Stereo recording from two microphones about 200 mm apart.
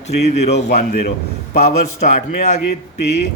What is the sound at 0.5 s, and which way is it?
Speech, 50° left (ahead or behind).